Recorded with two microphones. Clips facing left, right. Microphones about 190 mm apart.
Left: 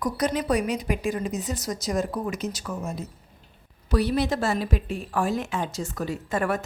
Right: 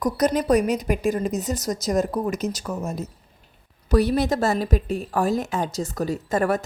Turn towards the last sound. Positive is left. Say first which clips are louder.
# right 4 dB
turn(degrees=-40)  # may be behind; listen again after turning